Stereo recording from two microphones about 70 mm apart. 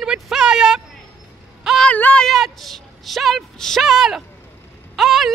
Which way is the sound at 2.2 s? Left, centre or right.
Centre.